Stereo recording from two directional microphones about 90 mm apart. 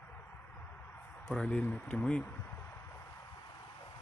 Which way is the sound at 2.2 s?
20° left (ahead or behind).